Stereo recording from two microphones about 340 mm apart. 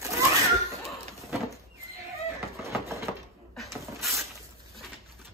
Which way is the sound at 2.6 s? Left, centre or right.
Centre.